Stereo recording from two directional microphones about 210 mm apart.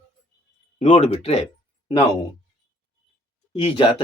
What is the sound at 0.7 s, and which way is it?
Speech, 30° left (ahead or behind).